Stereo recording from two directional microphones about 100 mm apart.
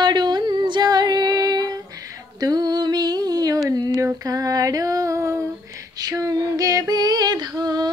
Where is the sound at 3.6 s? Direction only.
35° right (ahead or behind).